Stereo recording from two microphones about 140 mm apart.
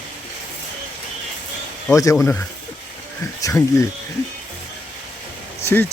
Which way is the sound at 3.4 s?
25° left (ahead or behind).